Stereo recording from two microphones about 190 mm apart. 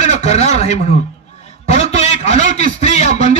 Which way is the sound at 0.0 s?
35° left (ahead or behind).